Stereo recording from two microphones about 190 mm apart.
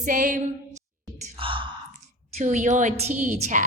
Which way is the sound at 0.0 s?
45° right (ahead or behind).